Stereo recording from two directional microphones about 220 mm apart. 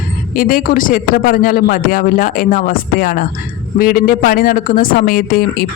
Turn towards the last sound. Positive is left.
turn(degrees=45)  # may be behind; listen again after turning